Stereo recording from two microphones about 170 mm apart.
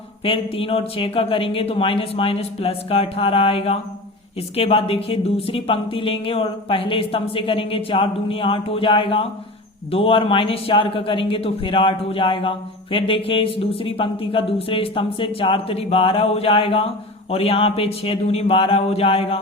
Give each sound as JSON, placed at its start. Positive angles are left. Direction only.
{"t": 0.3, "sound": "a man's voice", "side_deg": 35}